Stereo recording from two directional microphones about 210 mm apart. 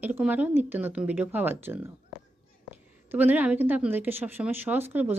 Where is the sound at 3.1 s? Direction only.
10° right (ahead or behind).